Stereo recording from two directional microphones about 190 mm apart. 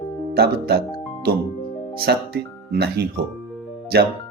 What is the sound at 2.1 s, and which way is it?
Speech, 55° right (ahead or behind).